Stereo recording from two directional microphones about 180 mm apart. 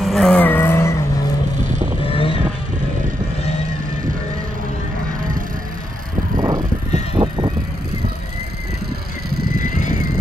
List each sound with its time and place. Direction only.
0.0 s vehicle: centre (ahead or behind)
2.0 s vehicle: 30° left (ahead or behind)
6.3 s vehicle: 20° right (ahead or behind)
9.6 s vehicle: 45° left (ahead or behind)